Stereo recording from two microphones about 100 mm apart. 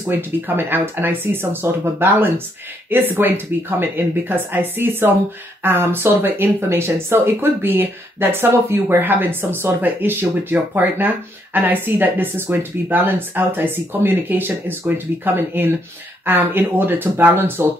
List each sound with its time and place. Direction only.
0.1 s speech: 20° right (ahead or behind)